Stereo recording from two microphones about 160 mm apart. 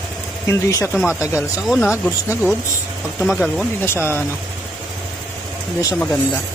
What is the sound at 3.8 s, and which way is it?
Speech, 15° left (ahead or behind).